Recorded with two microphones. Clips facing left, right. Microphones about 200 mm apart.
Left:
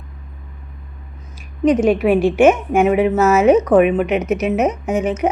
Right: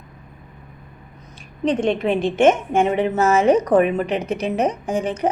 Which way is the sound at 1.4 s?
5° left (ahead or behind).